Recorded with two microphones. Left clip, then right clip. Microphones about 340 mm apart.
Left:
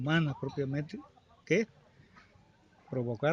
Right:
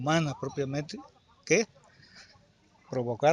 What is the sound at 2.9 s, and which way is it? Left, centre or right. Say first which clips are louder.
Speech: right 4 dB; right.